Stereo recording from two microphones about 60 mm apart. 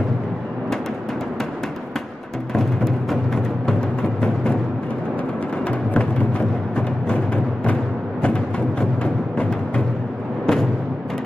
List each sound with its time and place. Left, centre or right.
2.5 s music: centre
5.7 s music: centre
8.2 s music: centre